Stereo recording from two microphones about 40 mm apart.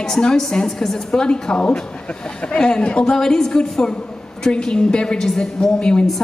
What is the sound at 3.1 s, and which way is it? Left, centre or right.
A woman's voice, centre.